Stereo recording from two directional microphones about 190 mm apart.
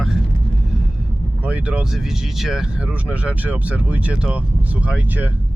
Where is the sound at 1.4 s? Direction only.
5° right (ahead or behind).